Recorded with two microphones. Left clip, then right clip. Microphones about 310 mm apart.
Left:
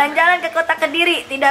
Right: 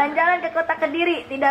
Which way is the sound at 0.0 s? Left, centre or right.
Centre.